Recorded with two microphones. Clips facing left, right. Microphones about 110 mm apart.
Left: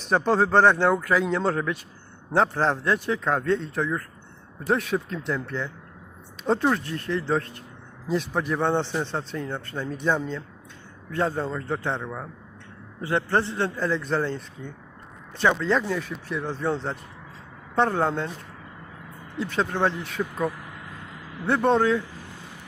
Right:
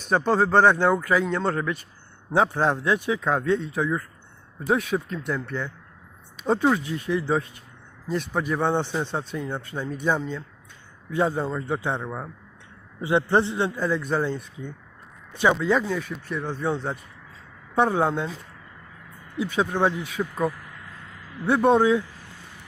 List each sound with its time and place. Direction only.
0.0 s a man's voice: centre (ahead or behind)
19.4 s a man's voice: 10° right (ahead or behind)